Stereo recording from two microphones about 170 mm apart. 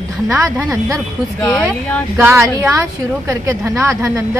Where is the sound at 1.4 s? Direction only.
5° left (ahead or behind).